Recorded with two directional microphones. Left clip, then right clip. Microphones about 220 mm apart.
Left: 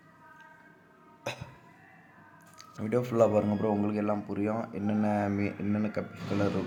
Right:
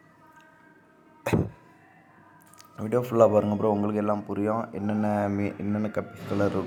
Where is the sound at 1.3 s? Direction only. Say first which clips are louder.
Right 10 dB; 15° right (ahead or behind).